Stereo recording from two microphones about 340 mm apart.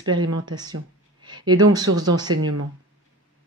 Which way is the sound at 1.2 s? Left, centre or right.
Centre.